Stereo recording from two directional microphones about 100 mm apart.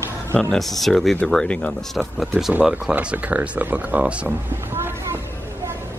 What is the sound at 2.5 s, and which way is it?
Speech, 10° right (ahead or behind).